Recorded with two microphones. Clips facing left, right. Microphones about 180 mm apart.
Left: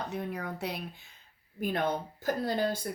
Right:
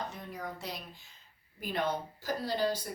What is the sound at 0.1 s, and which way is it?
A woman's voice, 65° left (ahead or behind).